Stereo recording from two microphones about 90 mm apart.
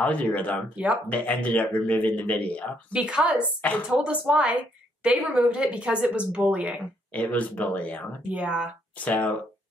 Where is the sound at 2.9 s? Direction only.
10° right (ahead or behind).